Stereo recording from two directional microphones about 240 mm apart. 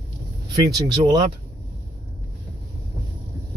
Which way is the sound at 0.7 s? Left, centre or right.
Centre.